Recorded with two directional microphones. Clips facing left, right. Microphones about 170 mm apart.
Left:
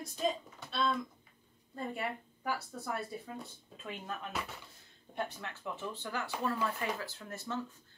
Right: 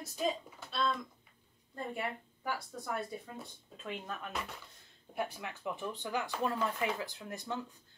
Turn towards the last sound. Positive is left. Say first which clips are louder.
# even
turn(degrees=-15)  # may be behind; listen again after turning